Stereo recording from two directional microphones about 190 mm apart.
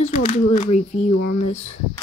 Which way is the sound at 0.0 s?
35° left (ahead or behind).